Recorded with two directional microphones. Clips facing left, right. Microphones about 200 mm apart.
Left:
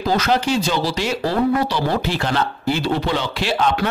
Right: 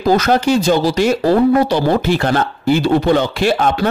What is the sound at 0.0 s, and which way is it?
Speech, 45° right (ahead or behind).